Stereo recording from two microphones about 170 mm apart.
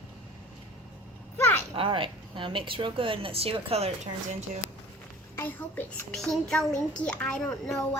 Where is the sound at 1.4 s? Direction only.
10° left (ahead or behind).